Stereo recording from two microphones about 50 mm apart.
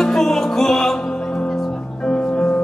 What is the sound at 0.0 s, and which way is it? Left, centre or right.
Music, centre.